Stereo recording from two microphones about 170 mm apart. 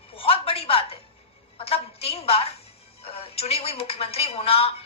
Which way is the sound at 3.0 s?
35° left (ahead or behind).